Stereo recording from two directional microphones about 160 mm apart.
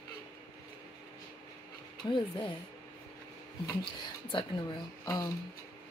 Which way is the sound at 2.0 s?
30° left (ahead or behind).